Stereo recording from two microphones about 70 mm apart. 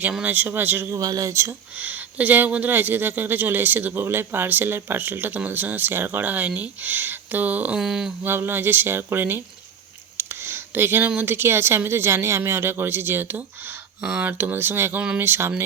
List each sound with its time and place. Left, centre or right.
0.2 s speech: right
0.9 s speech: right
1.3 s speech: right
1.8 s speech: right
7.8 s a sound: centre
8.2 s speech: right
10.2 s a sound: right
11.2 s speech: right
14.0 s a sound: centre
14.3 s speech: right